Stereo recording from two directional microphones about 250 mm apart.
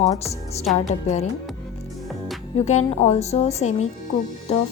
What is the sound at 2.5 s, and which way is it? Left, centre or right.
A woman's voice, left.